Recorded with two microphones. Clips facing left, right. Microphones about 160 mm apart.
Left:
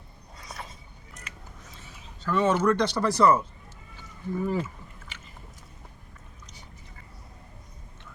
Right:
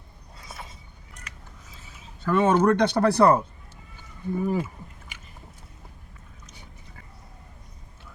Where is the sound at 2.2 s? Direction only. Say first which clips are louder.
Right 3 dB; 55° right (ahead or behind).